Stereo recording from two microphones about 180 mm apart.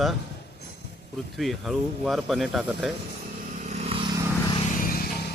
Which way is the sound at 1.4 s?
Centre (ahead or behind).